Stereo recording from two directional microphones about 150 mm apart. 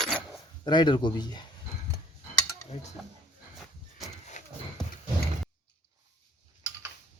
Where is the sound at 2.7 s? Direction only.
45° left (ahead or behind).